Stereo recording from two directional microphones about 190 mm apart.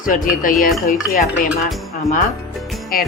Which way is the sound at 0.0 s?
45° left (ahead or behind).